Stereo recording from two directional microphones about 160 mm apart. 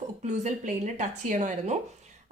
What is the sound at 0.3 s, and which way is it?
Speech, 50° right (ahead or behind).